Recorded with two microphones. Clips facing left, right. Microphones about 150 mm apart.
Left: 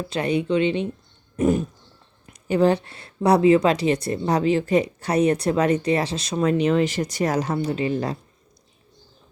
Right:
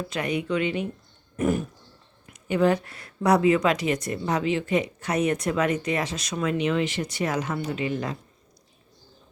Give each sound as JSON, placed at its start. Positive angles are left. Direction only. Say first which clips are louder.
{"t": 0.1, "sound": "speech", "louder": "left 6 dB", "side_deg": 30}
{"t": 2.2, "sound": "a woman's voice", "louder": "left 3 dB", "side_deg": 35}